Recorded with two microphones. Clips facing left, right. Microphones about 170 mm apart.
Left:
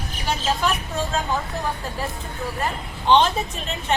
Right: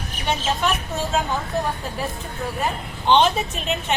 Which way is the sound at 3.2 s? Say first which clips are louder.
Right 2 dB; 20° right (ahead or behind).